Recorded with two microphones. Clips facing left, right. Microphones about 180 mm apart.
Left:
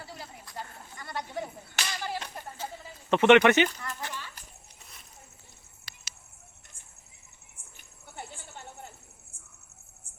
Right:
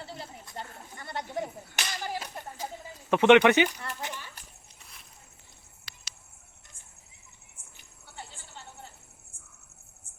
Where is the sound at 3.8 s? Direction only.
20° right (ahead or behind).